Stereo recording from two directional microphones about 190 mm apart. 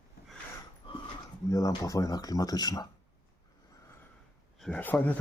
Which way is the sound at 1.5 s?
20° left (ahead or behind).